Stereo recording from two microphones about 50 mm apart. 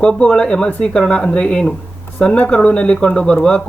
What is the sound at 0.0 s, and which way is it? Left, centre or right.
Speech, centre.